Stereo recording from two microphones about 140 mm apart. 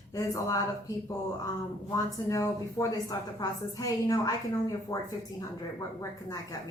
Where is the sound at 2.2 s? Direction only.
25° left (ahead or behind).